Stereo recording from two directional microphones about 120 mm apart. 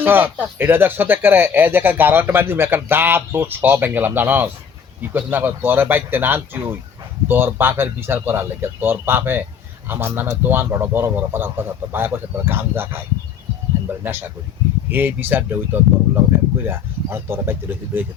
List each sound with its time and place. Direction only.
0.0 s a man's voice: 15° right (ahead or behind)
14.0 s a man's voice: 20° right (ahead or behind)